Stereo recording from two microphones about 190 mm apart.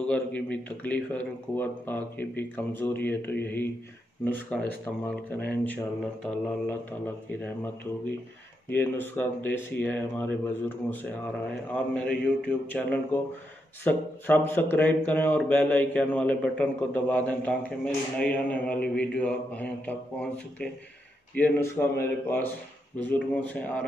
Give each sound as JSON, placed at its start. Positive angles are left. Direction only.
{"t": 0.1, "sound": "speech", "side_deg": 5}
{"t": 8.6, "sound": "speech", "side_deg": 10}